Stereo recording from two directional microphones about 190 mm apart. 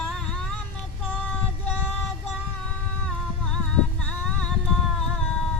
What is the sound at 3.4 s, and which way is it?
Music, 5° left (ahead or behind).